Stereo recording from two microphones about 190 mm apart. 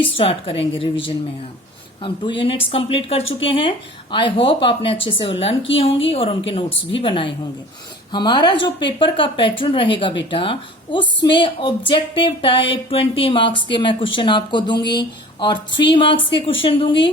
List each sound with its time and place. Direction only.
0.2 s a woman's voice: 30° left (ahead or behind)